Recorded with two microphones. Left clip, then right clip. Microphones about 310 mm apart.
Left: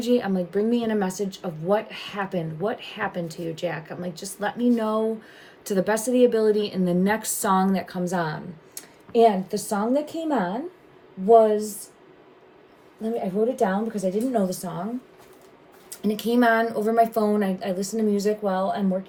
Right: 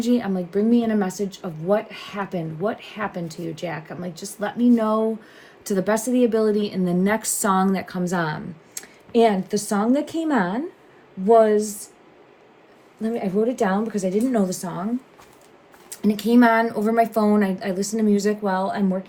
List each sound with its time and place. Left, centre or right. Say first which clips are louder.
0.0 s a woman's voice: even; centre
13.0 s a woman's voice: right 2 dB; right
15.9 s a woman's voice: right 4 dB; right